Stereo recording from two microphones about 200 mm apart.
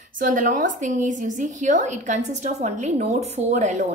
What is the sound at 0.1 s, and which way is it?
A woman's voice, 40° right (ahead or behind).